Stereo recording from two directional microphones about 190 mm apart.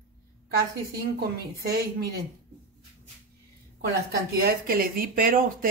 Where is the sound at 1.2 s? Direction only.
55° right (ahead or behind).